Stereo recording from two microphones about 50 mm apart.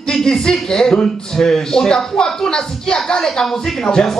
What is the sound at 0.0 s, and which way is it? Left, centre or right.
A man's voice, centre.